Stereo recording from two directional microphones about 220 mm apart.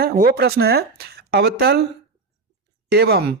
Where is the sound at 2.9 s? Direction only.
45° right (ahead or behind).